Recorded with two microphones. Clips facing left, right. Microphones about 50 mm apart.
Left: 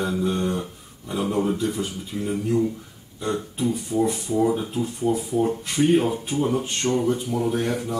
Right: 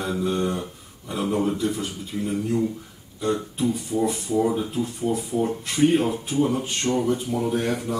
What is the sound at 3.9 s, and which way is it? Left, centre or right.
Speech, centre.